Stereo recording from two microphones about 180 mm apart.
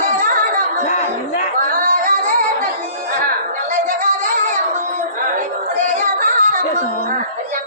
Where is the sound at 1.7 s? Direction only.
45° right (ahead or behind).